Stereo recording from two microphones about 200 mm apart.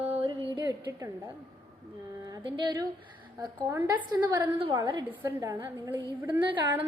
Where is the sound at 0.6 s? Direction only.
20° right (ahead or behind).